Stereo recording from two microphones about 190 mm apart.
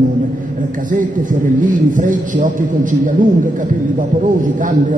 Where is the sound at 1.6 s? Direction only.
45° right (ahead or behind).